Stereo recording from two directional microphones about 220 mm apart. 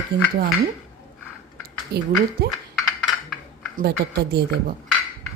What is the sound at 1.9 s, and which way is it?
Speech, 45° right (ahead or behind).